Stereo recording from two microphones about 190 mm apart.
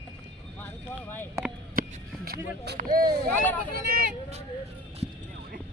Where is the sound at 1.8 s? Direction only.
50° right (ahead or behind).